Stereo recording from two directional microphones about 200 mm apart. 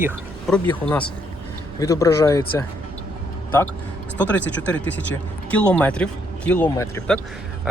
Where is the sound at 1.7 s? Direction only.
15° left (ahead or behind).